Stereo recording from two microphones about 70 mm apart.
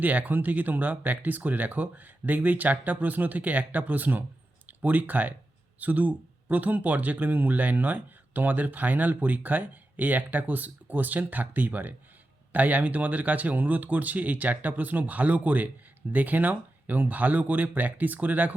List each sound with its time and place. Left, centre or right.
0.0 s speech: right